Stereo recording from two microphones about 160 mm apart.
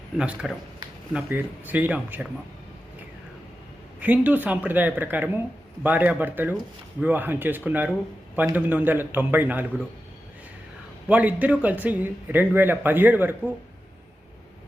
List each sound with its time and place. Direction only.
0.2 s a man's voice: 5° right (ahead or behind)
4.0 s a man's voice: 10° right (ahead or behind)
11.1 s a man's voice: 10° right (ahead or behind)